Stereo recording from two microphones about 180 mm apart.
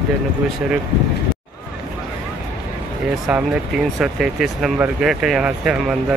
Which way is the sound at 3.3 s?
5° right (ahead or behind).